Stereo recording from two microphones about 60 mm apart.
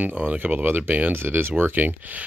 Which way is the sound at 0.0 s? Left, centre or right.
Right.